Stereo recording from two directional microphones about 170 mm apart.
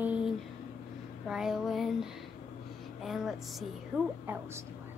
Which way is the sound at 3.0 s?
Centre (ahead or behind).